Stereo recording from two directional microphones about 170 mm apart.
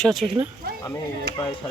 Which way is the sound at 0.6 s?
65° right (ahead or behind).